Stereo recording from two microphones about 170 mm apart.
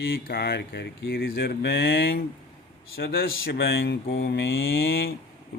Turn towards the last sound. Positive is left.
turn(degrees=65)  # may be behind; listen again after turning